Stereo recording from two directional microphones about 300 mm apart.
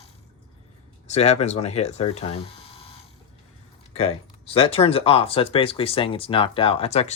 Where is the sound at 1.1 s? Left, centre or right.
Left.